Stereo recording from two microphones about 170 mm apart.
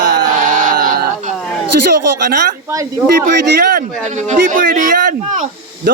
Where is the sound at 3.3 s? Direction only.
55° right (ahead or behind).